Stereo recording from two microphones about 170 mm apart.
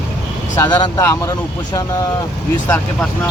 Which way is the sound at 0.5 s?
25° left (ahead or behind).